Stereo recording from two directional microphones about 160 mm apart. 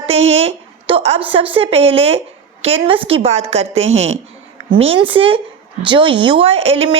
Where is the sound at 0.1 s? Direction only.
40° right (ahead or behind).